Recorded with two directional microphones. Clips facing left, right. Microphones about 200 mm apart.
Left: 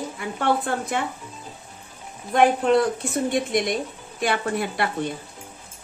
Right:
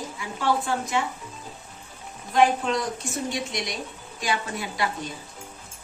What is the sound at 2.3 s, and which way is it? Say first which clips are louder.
Speech: left 4 dB; 60° left (ahead or behind).